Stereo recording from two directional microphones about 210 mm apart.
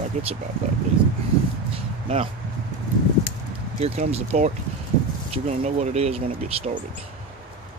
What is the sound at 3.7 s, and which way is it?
Speech, 30° right (ahead or behind).